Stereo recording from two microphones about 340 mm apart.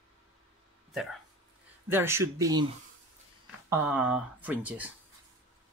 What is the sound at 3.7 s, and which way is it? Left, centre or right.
Speech, centre.